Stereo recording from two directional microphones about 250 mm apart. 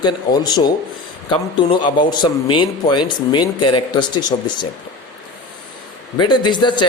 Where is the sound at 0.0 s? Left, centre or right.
Centre.